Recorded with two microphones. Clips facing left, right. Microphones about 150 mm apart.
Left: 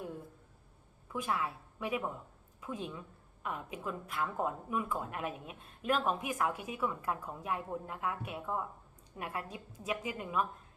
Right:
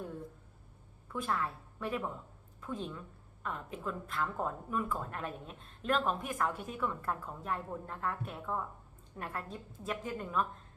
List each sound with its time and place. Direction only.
1.2 s a woman's voice: 5° left (ahead or behind)